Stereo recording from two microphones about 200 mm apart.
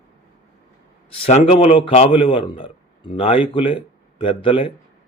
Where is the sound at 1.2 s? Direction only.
30° left (ahead or behind).